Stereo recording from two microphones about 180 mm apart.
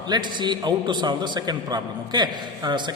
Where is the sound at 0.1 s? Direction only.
25° right (ahead or behind).